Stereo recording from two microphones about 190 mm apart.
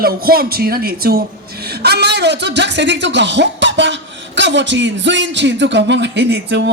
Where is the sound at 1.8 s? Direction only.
60° right (ahead or behind).